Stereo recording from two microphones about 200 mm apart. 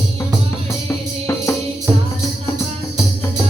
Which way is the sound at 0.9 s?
15° left (ahead or behind).